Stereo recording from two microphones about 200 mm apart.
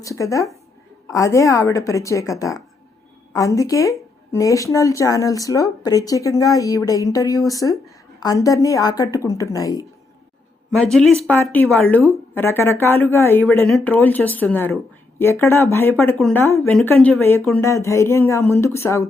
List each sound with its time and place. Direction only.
0.0 s speech: 15° left (ahead or behind)
10.9 s a woman's voice: centre (ahead or behind)